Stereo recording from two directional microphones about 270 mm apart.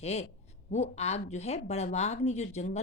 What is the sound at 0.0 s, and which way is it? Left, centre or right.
Speech, left.